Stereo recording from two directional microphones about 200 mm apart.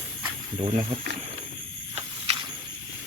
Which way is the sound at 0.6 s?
30° right (ahead or behind).